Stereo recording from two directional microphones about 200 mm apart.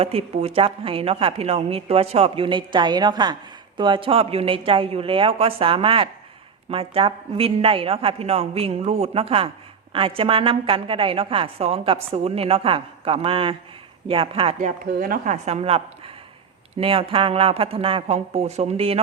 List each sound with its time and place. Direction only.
0.0 s a woman's voice: 30° right (ahead or behind)